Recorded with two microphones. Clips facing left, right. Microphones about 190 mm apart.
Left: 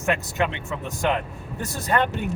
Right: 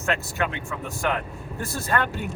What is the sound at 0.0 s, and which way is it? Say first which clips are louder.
Speech: left 2 dB; 15° left (ahead or behind).